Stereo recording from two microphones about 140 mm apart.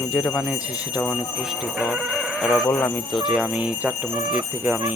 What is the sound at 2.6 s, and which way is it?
Speech, 10° left (ahead or behind).